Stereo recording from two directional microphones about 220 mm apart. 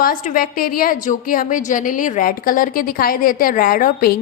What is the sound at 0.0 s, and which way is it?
A woman's voice, 40° left (ahead or behind).